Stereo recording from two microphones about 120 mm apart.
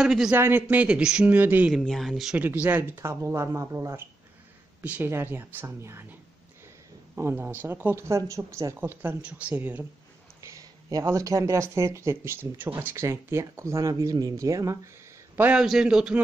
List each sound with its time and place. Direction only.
0.0 s speech: 5° right (ahead or behind)
0.3 s speech: 15° right (ahead or behind)
1.7 s speech: centre (ahead or behind)
2.3 s speech: 15° right (ahead or behind)
7.2 s speech: 20° right (ahead or behind)
10.4 s speech: 30° right (ahead or behind)
15.3 s a man's voice: 15° right (ahead or behind)
15.6 s speech: 5° right (ahead or behind)